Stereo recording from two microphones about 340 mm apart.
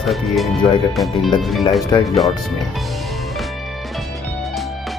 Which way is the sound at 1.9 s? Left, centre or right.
Centre.